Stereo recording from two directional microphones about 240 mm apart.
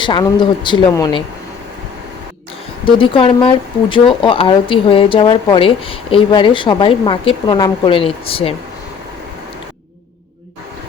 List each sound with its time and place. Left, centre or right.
0.0 s speech: centre
2.8 s speech: left